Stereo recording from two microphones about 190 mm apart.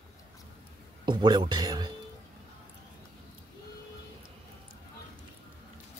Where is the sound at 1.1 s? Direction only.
20° right (ahead or behind).